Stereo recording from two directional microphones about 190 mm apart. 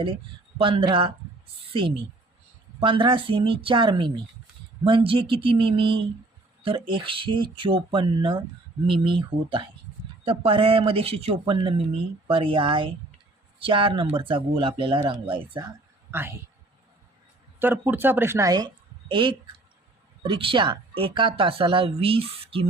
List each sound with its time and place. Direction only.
0.6 s speech: 25° right (ahead or behind)
2.8 s speech: 25° right (ahead or behind)
16.1 s a man's voice: 10° right (ahead or behind)
17.6 s a woman's voice: 10° right (ahead or behind); by 22.7 s 30° right (ahead or behind)